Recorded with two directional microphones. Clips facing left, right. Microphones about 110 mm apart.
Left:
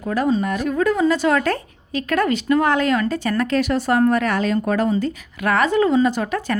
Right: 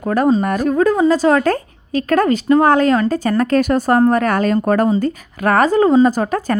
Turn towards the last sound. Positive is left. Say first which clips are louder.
# right 4 dB
turn(degrees=-40)  # may be behind; listen again after turning